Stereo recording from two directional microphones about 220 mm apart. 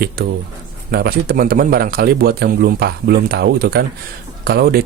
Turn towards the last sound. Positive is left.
turn(degrees=-45)  # may be behind; listen again after turning